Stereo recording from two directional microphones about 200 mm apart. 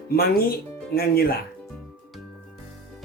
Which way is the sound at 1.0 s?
50° left (ahead or behind).